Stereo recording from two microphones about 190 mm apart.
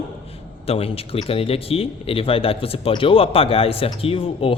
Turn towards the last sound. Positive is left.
turn(degrees=30)  # may be behind; listen again after turning